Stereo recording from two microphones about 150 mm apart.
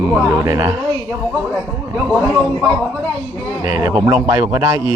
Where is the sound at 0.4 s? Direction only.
20° right (ahead or behind).